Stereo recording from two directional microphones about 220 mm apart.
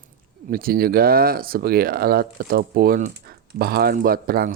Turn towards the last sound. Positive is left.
turn(degrees=-45)  # may be behind; listen again after turning